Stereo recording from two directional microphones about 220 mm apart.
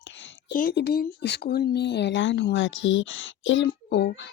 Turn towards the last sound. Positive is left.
turn(degrees=50)  # may be behind; listen again after turning